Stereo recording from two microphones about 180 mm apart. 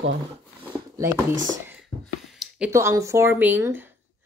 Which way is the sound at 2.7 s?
15° right (ahead or behind).